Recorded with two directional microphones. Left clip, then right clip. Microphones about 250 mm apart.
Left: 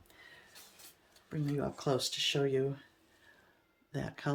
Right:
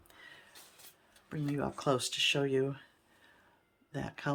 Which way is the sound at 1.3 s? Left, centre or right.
Centre.